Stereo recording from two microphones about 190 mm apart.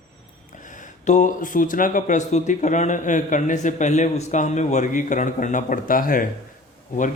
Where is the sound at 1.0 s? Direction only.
40° left (ahead or behind).